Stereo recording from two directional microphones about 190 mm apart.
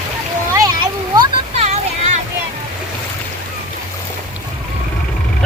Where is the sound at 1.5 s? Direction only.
35° right (ahead or behind).